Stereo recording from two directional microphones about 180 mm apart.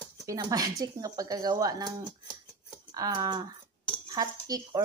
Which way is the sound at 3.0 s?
25° right (ahead or behind).